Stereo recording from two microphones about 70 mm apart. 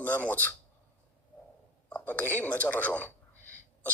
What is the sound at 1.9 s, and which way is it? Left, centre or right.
A man's voice, left.